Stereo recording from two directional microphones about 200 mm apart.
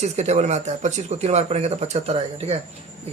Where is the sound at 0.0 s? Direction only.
35° right (ahead or behind).